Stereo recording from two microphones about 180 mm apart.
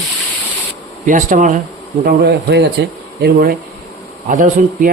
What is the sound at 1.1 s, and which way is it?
Speech, 45° right (ahead or behind).